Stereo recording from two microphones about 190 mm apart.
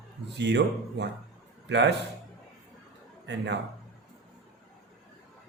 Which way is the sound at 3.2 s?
65° right (ahead or behind).